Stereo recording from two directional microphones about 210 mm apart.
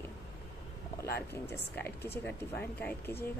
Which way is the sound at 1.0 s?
50° left (ahead or behind).